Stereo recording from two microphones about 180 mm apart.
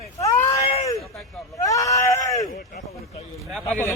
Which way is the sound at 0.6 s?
35° left (ahead or behind).